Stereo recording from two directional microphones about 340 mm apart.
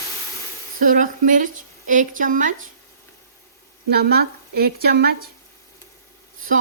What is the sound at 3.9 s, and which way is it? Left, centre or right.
Speech, right.